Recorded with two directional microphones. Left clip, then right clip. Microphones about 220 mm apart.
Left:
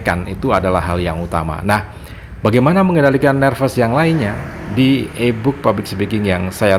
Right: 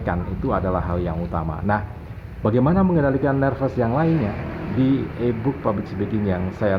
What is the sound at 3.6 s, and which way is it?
Speech, 45° left (ahead or behind).